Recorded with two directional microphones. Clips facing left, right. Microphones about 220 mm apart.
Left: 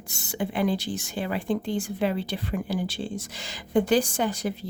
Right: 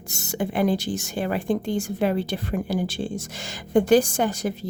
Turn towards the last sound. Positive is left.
turn(degrees=-45)  # may be behind; listen again after turning